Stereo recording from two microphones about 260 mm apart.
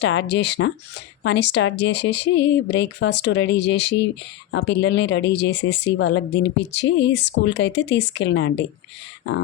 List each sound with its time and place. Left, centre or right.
0.0 s speech: left